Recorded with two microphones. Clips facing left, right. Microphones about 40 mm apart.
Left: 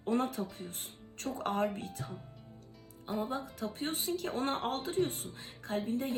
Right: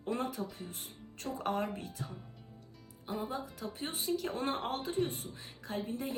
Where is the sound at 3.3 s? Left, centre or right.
Left.